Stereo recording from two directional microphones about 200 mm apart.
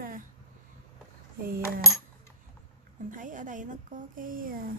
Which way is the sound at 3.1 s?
40° right (ahead or behind).